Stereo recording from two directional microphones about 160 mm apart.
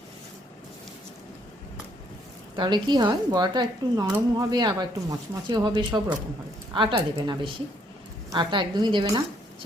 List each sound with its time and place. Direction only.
2.6 s a woman's voice: 30° right (ahead or behind)